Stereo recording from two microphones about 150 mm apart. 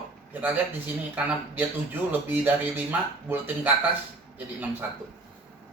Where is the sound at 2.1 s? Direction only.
10° right (ahead or behind).